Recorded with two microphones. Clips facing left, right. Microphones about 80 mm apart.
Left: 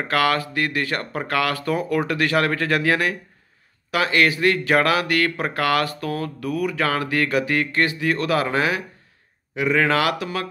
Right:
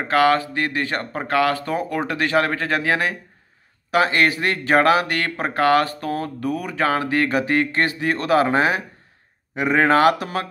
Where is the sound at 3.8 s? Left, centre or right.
Right.